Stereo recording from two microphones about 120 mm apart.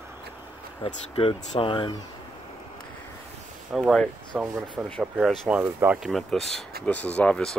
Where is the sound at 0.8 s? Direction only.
50° left (ahead or behind).